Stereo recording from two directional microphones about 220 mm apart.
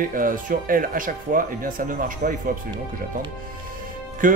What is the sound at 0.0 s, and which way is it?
Speech, 40° right (ahead or behind).